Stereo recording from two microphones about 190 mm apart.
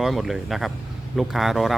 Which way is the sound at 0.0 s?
Centre (ahead or behind).